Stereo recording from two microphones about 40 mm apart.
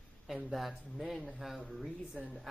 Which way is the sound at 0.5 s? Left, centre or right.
Centre.